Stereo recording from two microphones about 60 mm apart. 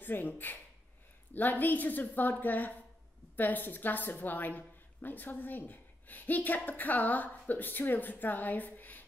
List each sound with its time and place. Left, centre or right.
0.0 s a woman's voice: left